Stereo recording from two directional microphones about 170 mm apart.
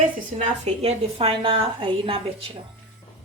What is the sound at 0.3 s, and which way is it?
A woman's voice, 40° right (ahead or behind).